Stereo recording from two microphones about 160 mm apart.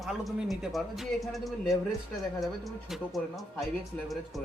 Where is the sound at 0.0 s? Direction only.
Centre (ahead or behind).